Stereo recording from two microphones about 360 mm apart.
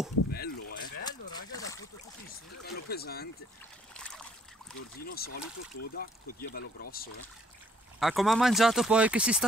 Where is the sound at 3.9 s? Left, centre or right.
Centre.